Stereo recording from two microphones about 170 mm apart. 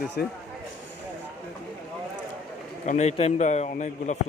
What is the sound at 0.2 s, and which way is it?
Speech, 65° left (ahead or behind).